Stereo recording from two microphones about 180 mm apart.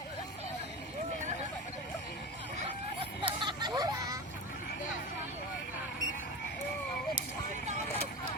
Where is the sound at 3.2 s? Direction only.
25° right (ahead or behind).